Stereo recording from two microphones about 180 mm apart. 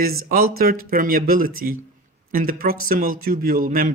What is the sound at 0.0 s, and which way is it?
Speech, 55° right (ahead or behind).